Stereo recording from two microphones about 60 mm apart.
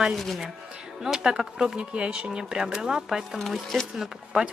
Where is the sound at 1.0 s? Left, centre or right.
Centre.